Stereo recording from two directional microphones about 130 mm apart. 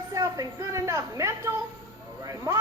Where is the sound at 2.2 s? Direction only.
25° right (ahead or behind).